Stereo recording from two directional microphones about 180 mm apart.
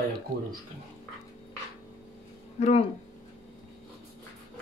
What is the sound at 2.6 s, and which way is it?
Speech, 35° left (ahead or behind).